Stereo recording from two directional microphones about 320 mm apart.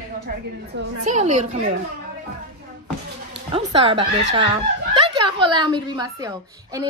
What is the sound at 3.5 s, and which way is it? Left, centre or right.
A woman's voice, centre.